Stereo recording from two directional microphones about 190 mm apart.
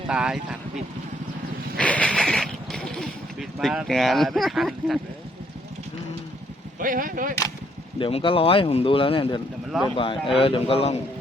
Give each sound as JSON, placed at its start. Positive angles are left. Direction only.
{"t": 0.1, "sound": "speech", "side_deg": -5}
{"t": 1.7, "sound": "a sound", "side_deg": 5}
{"t": 6.7, "sound": "speech", "side_deg": -45}
{"t": 7.9, "sound": "speech", "side_deg": 25}